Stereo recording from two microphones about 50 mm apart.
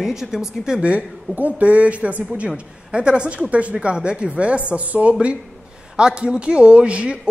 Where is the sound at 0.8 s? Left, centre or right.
Right.